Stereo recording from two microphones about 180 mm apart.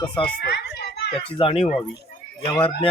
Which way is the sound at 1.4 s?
30° left (ahead or behind).